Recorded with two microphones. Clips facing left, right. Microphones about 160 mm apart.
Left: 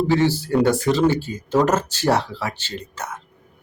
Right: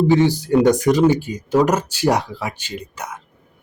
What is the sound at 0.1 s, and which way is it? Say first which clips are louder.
A man's voice: right 3 dB; 15° right (ahead or behind).